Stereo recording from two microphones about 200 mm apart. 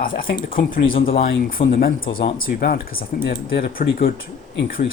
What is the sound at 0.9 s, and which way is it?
Speech, 30° left (ahead or behind).